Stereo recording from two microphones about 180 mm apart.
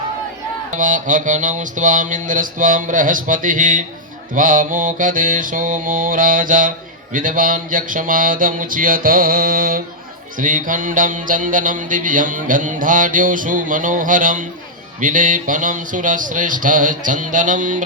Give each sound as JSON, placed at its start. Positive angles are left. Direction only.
{"t": 0.7, "sound": "mantra", "side_deg": -45}